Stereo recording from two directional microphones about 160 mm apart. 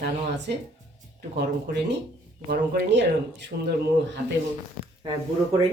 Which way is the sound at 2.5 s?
80° right.